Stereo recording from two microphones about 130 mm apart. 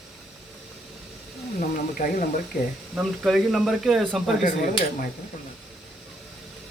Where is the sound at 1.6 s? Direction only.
90° left.